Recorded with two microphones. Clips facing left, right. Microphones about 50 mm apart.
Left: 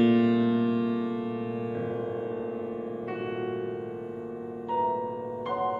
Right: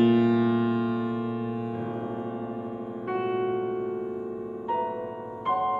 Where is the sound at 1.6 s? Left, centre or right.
Centre.